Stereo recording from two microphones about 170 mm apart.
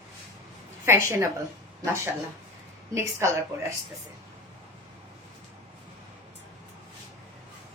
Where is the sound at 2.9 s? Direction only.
15° right (ahead or behind).